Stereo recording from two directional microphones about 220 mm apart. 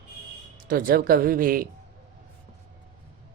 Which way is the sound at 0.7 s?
40° right (ahead or behind).